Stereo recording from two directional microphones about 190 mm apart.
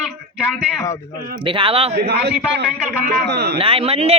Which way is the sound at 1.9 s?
55° right (ahead or behind).